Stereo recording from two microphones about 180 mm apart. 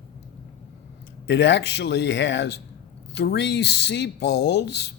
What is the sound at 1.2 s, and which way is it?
Speech, 75° left (ahead or behind).